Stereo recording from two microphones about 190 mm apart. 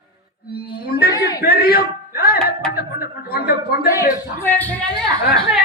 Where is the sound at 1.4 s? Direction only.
55° left (ahead or behind).